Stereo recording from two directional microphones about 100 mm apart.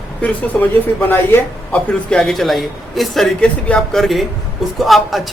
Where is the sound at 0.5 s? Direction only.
5° left (ahead or behind).